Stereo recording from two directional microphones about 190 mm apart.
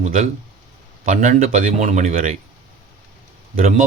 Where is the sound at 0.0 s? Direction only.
45° right (ahead or behind).